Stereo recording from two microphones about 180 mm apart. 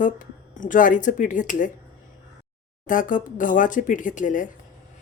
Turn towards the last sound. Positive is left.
turn(degrees=45)  # may be behind; listen again after turning